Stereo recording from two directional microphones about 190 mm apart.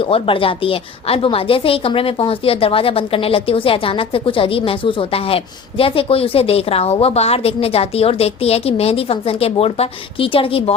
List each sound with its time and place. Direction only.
0.0 s a woman's voice: 30° left (ahead or behind)